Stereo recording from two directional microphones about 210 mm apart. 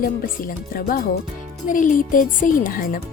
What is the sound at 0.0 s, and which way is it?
Speech, 40° left (ahead or behind).